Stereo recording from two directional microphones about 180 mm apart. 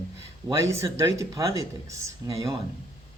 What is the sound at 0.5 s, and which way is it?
Speech, 15° right (ahead or behind).